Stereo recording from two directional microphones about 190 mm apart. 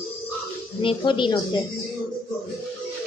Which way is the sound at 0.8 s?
25° left (ahead or behind).